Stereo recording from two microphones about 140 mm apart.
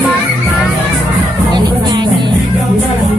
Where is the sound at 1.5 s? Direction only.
30° right (ahead or behind).